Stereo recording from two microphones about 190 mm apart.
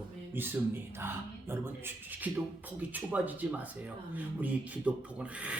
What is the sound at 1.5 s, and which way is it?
Speech, 10° right (ahead or behind).